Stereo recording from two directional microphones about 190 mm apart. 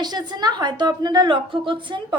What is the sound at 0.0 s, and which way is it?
A woman's voice, 20° right (ahead or behind).